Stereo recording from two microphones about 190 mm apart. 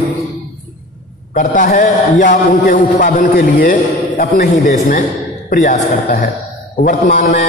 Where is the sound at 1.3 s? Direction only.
45° left (ahead or behind).